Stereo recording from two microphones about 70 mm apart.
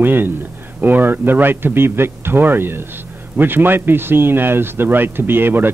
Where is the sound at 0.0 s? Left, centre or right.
Right.